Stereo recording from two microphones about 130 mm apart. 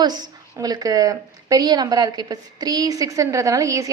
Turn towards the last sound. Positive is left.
turn(degrees=-25)  # may be behind; listen again after turning